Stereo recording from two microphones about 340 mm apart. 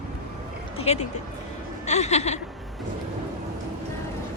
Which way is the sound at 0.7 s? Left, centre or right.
Centre.